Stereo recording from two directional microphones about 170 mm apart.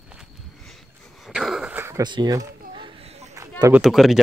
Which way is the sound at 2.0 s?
25° right (ahead or behind).